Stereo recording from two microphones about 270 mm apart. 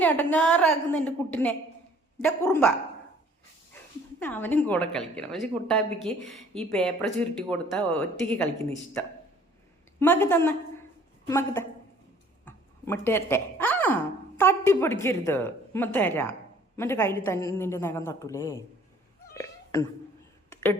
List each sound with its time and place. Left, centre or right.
0.0 s a woman's voice: centre
4.2 s a woman's voice: centre
10.0 s a woman's voice: centre
19.3 s a sound: centre